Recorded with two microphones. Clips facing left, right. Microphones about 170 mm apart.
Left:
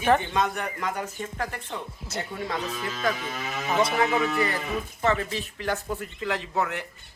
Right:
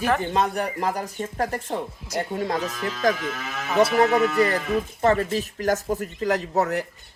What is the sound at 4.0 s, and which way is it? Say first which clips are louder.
Speech: right 5 dB; 45° right (ahead or behind).